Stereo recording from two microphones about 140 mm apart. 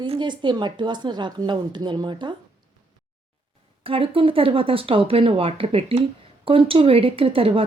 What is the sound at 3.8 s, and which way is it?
A woman's voice, 40° right (ahead or behind).